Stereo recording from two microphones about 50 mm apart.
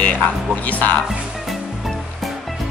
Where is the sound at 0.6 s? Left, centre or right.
Left.